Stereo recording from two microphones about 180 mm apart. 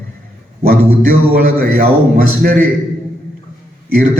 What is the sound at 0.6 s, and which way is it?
A man's voice, 55° right (ahead or behind).